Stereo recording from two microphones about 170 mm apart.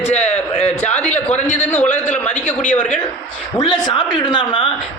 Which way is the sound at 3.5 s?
25° left (ahead or behind).